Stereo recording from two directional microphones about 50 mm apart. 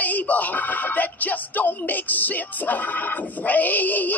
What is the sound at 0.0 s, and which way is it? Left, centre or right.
Speech, left.